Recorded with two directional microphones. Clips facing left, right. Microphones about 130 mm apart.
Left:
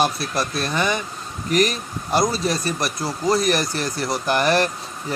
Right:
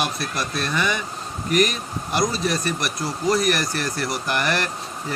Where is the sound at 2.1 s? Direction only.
35° left (ahead or behind).